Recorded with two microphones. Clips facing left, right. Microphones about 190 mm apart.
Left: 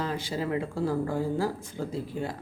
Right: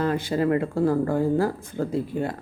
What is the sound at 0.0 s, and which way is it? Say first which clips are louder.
Speech: right 8 dB; 55° right (ahead or behind).